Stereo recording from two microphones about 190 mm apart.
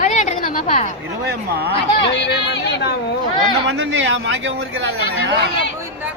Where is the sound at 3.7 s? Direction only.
75° right (ahead or behind).